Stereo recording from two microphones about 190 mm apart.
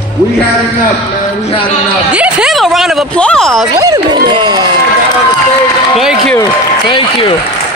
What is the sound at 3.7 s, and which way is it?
Speech, 20° right (ahead or behind).